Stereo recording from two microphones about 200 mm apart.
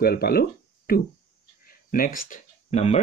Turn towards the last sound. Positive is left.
turn(degrees=35)  # may be behind; listen again after turning